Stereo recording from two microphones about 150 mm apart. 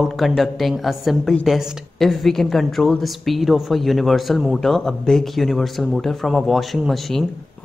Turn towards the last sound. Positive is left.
turn(degrees=0)  # may be behind; listen again after turning